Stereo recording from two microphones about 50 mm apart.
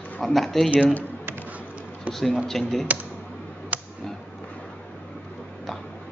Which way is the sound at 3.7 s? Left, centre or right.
Right.